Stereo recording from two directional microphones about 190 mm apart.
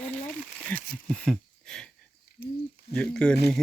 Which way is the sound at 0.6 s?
5° left (ahead or behind).